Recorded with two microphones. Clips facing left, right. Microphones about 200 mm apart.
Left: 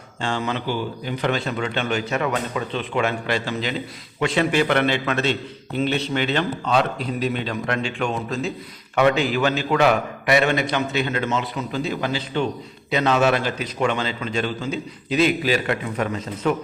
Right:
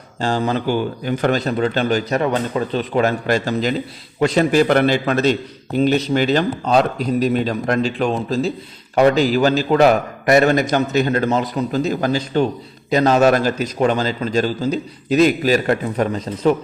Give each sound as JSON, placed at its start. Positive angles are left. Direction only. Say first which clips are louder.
{"t": 0.2, "sound": "a man's voice", "louder": "right 6 dB", "side_deg": -40}